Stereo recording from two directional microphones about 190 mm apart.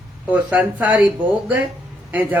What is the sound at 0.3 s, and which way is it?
Speech, 10° right (ahead or behind).